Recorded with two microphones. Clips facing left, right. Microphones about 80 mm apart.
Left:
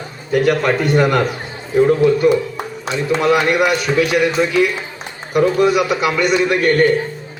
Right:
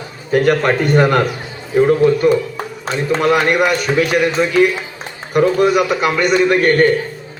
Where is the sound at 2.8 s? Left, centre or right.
Right.